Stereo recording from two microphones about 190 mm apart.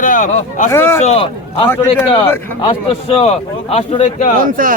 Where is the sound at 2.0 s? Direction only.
25° left (ahead or behind).